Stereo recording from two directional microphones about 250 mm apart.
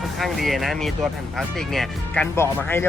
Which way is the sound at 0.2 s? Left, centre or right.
Centre.